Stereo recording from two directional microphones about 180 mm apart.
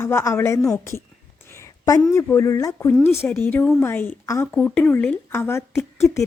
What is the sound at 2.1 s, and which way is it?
A woman's voice, 15° left (ahead or behind).